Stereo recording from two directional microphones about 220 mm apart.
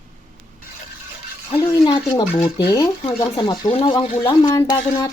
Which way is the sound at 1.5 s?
15° left (ahead or behind).